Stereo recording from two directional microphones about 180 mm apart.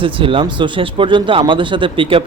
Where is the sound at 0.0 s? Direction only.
30° right (ahead or behind).